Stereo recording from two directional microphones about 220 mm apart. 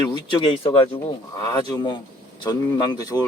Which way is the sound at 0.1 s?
20° left (ahead or behind).